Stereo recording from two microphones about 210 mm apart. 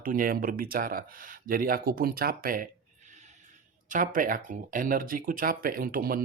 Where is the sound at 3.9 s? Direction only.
40° right (ahead or behind).